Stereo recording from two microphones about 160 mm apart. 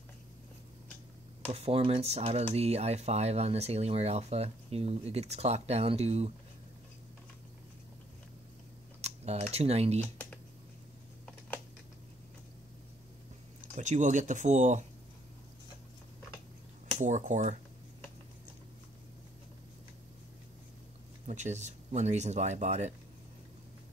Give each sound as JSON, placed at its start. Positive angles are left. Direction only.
{"t": 1.5, "sound": "speech", "side_deg": -40}
{"t": 9.0, "sound": "speech", "side_deg": -40}
{"t": 13.6, "sound": "speech", "side_deg": -50}
{"t": 17.0, "sound": "speech", "side_deg": -50}
{"t": 21.3, "sound": "speech", "side_deg": -45}